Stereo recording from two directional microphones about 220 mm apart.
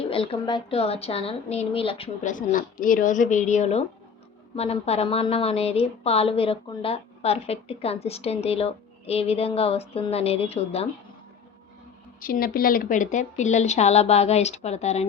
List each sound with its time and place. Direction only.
0.0 s a woman's voice: 25° left (ahead or behind)
2.2 s a woman's voice: 35° left (ahead or behind)
12.2 s a woman's voice: 40° left (ahead or behind)